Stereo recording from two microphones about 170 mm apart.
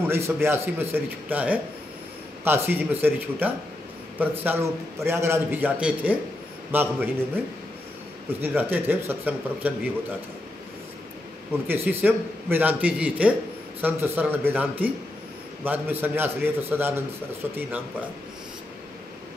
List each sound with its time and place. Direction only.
0.0 s a man's voice: 15° right (ahead or behind)
8.4 s a man's voice: 10° right (ahead or behind)
11.6 s a man's voice: 10° right (ahead or behind)